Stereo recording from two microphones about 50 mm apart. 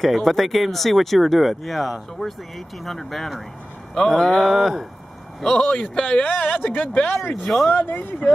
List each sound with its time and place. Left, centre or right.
0.0 s speech: centre
4.0 s a sound: centre
4.5 s speech: centre
5.4 s speech: centre
5.7 s speech: left
6.2 s speech: left
7.4 s speech: centre
7.7 s speech: left